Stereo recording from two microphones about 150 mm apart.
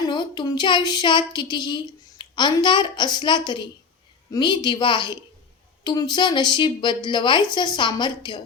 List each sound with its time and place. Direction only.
0.1 s child singing: 30° left (ahead or behind)
4.3 s a woman's voice: 30° left (ahead or behind)
5.8 s child singing: 30° left (ahead or behind)